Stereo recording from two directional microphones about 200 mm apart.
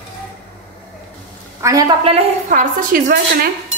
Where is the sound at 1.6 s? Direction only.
15° right (ahead or behind).